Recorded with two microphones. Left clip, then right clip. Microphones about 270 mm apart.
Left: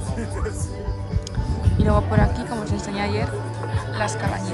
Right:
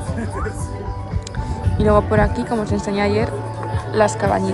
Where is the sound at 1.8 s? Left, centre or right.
Centre.